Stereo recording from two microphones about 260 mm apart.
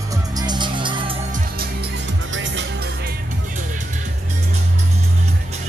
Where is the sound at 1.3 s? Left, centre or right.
Right.